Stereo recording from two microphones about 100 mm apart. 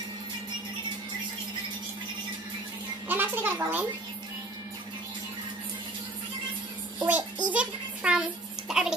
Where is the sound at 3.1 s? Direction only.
20° right (ahead or behind).